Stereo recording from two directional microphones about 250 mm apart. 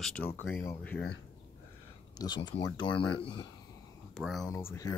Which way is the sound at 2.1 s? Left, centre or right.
Centre.